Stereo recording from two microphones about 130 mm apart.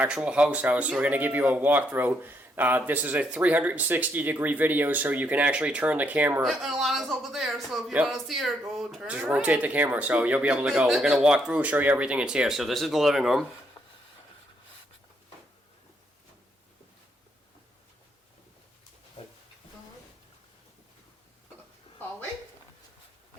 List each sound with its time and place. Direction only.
0.0 s speech: 5° right (ahead or behind)
6.4 s speech: centre (ahead or behind)
13.8 s a sound: 25° left (ahead or behind)